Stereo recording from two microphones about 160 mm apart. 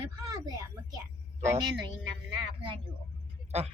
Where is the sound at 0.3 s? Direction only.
25° right (ahead or behind).